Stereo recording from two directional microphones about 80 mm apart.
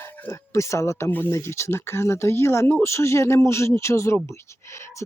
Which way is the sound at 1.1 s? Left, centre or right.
Left.